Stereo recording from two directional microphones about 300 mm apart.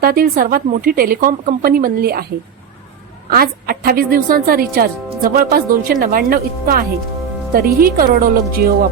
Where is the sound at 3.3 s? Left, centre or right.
Right.